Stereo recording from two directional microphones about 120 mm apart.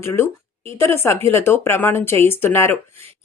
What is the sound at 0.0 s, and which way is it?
A woman's voice, 20° left (ahead or behind).